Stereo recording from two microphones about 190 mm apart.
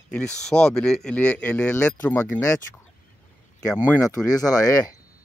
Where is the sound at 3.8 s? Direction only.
20° left (ahead or behind).